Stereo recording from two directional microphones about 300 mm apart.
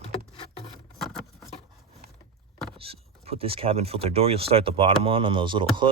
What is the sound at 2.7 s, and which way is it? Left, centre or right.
Speech, centre.